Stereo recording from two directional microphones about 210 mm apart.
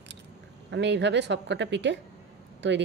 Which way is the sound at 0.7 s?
55° right (ahead or behind).